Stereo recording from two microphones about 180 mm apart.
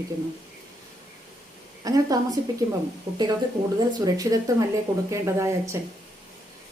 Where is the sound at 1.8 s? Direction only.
20° right (ahead or behind).